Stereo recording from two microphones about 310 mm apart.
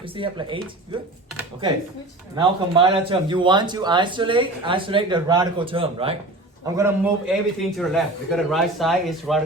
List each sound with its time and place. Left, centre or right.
0.0 s a man's voice: centre
2.3 s a man's voice: centre
6.7 s a man's voice: centre